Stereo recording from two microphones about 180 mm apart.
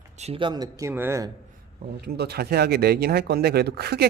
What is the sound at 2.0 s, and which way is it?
Speech, 65° right (ahead or behind).